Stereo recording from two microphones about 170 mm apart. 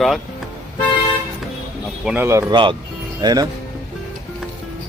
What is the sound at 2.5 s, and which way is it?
Speech, 30° right (ahead or behind).